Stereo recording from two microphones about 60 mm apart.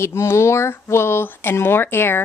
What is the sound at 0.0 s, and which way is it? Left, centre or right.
Speech, left.